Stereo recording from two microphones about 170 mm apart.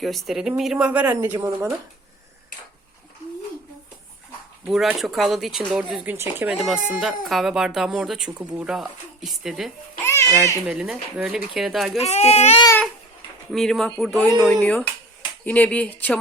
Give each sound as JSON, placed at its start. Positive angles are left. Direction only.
{"t": 0.0, "sound": "speech", "side_deg": 0}
{"t": 4.6, "sound": "speech", "side_deg": -5}
{"t": 6.6, "sound": "speech", "side_deg": 0}
{"t": 10.0, "sound": "babbling", "side_deg": 15}
{"t": 10.7, "sound": "speech", "side_deg": -5}
{"t": 11.9, "sound": "speech", "side_deg": 40}
{"t": 13.5, "sound": "speech", "side_deg": 0}